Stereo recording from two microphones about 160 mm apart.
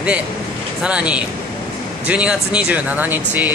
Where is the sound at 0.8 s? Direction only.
5° right (ahead or behind).